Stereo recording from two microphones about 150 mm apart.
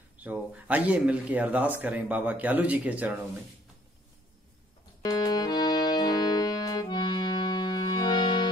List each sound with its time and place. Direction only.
0.2 s speech: 10° right (ahead or behind)
5.0 s music: 25° left (ahead or behind)